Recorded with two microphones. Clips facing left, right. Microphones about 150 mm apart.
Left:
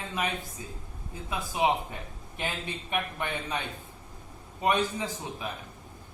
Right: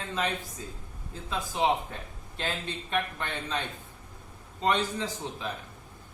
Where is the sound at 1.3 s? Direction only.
15° left (ahead or behind).